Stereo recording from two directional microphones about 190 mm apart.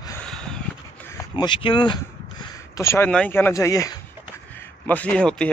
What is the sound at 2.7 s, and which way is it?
A man's voice, 15° left (ahead or behind).